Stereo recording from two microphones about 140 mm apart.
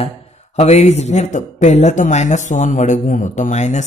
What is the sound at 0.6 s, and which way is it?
Speech, 50° left (ahead or behind).